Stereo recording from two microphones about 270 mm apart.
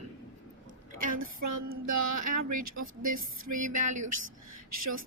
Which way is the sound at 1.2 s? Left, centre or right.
Right.